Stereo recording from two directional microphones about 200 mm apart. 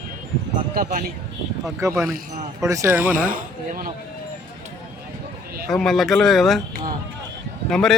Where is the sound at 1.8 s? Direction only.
15° right (ahead or behind).